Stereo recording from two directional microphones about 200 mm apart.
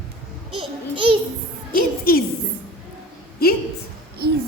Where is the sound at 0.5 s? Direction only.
25° right (ahead or behind).